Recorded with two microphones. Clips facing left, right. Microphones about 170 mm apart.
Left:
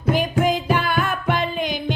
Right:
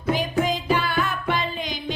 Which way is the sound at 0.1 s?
55° left (ahead or behind).